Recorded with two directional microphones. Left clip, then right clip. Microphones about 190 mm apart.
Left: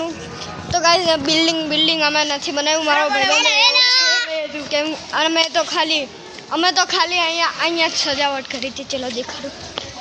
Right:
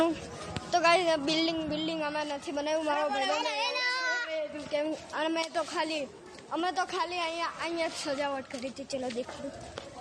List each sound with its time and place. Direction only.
0.8 s a woman's voice: 5° right (ahead or behind)
3.3 s children playing: 30° right (ahead or behind)
4.7 s a woman's voice: 10° left (ahead or behind)
6.8 s a woman's voice: centre (ahead or behind)
7.2 s a woman's voice: 20° left (ahead or behind)
8.0 s a woman's voice: centre (ahead or behind)